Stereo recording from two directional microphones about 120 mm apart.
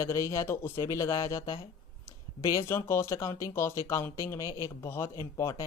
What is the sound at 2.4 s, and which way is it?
Speech, 25° left (ahead or behind).